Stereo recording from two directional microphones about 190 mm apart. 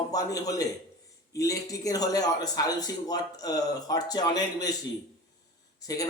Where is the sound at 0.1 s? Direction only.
20° left (ahead or behind).